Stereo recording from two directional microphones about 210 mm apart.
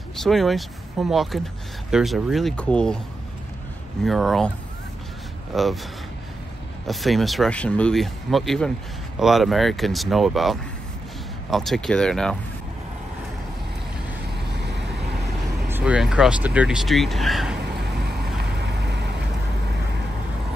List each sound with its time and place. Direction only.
0.1 s speech: centre (ahead or behind)
4.0 s speech: centre (ahead or behind)
5.5 s speech: centre (ahead or behind)
6.9 s speech: centre (ahead or behind)
14.6 s vehicle: 55° right (ahead or behind)
15.7 s speech: 5° right (ahead or behind)
17.7 s vehicle: 50° right (ahead or behind)